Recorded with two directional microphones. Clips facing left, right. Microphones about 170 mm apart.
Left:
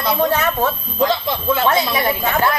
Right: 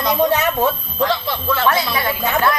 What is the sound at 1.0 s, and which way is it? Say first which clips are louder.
Speech: left 2 dB; 15° left (ahead or behind).